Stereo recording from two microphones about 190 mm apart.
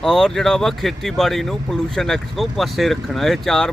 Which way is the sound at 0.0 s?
5° left (ahead or behind).